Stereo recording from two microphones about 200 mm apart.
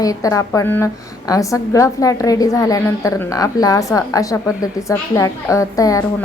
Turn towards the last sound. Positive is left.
turn(degrees=15)  # may be behind; listen again after turning